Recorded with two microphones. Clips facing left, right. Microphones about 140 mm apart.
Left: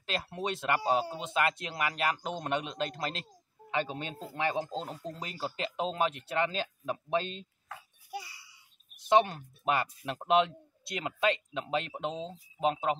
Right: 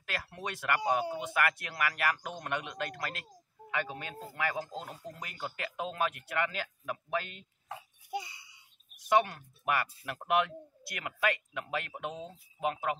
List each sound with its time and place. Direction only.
0.0 s speech: 20° left (ahead or behind)
7.6 s a sound: 25° right (ahead or behind)
9.0 s speech: 25° left (ahead or behind)